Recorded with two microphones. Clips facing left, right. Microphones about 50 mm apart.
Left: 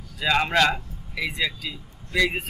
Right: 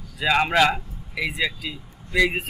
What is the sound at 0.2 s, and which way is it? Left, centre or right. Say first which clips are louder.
A man's voice: right 2 dB; centre.